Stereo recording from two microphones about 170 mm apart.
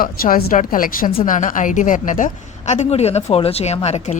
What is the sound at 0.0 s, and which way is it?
Speech, 60° left (ahead or behind).